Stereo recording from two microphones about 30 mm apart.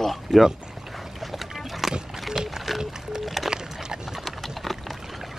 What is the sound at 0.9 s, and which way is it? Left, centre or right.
Boat, centre.